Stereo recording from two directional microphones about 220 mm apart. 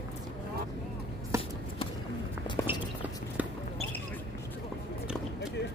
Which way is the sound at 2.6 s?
10° left (ahead or behind).